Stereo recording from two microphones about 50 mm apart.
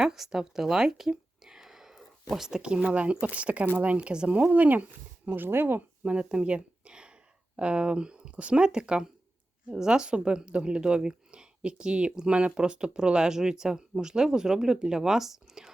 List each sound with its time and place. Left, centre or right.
0.0 s a sound: centre
2.3 s speech: centre
2.6 s speech: centre
4.4 s speech: right
5.5 s speech: right
6.1 s speech: right